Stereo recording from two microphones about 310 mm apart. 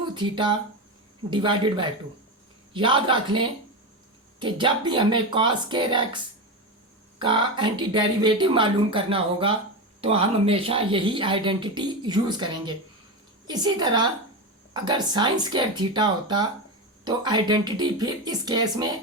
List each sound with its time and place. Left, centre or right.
0.0 s speech: centre
7.2 s speech: centre